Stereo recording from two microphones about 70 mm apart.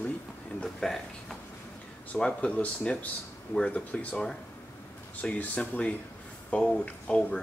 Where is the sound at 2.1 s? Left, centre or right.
Centre.